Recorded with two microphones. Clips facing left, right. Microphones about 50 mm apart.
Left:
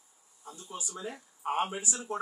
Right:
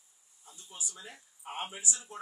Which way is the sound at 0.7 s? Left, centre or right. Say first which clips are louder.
Left 7 dB; left.